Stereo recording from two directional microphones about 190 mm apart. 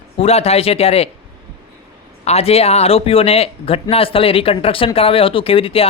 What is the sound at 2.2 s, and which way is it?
A man's voice, 30° left (ahead or behind).